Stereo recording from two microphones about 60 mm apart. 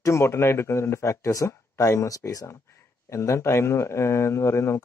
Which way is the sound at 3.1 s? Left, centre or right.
Left.